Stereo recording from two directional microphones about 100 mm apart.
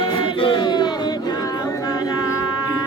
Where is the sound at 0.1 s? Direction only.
60° left (ahead or behind).